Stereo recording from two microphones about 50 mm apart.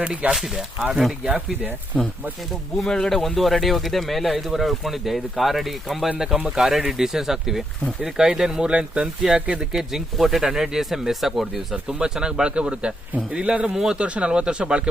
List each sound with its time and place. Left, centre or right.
0.0 s speech: right
1.9 s speech: centre
10.2 s speech: centre